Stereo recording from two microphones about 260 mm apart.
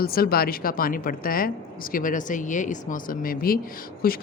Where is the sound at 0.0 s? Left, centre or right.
Left.